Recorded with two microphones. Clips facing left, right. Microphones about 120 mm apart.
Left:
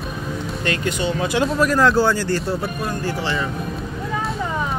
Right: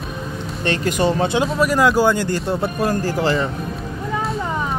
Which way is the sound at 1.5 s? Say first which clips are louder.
Even; 5° right (ahead or behind).